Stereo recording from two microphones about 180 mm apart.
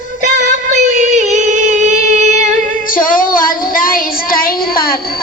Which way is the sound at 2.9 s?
50° left (ahead or behind).